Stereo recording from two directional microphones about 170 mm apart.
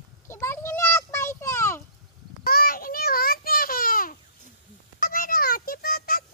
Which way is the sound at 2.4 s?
60° left (ahead or behind).